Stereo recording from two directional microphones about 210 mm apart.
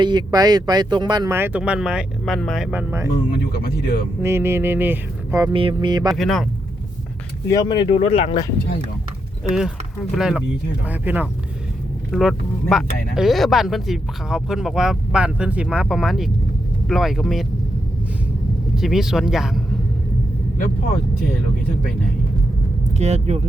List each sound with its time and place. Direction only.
0.0 s speech: 20° right (ahead or behind)
3.2 s speech: 45° left (ahead or behind)
4.2 s speech: 10° right (ahead or behind)
6.1 s speech: centre (ahead or behind)
7.4 s speech: 15° left (ahead or behind)
9.4 s speech: centre (ahead or behind)
18.8 s speech: centre (ahead or behind)
23.0 s speech: 30° right (ahead or behind)